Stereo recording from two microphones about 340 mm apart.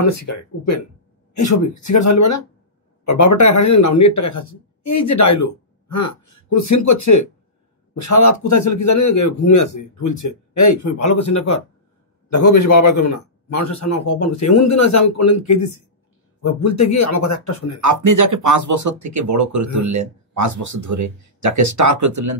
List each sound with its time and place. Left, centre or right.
0.0 s a man's voice: left
17.8 s speech: right